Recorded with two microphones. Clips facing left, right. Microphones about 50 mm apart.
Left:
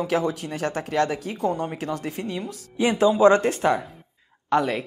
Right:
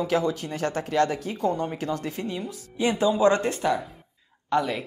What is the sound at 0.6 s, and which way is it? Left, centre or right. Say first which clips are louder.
Speech: even; centre.